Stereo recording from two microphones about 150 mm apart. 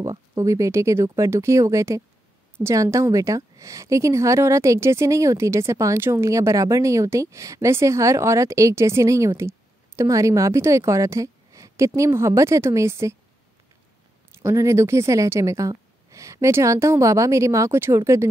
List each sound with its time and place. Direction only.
0.0 s a woman's voice: 20° right (ahead or behind)
14.4 s a woman's voice: 20° right (ahead or behind)